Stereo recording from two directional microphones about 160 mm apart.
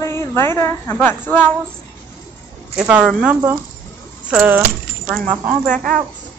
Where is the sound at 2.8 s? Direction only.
5° right (ahead or behind).